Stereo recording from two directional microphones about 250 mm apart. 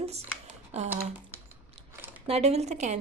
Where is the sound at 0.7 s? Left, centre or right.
Right.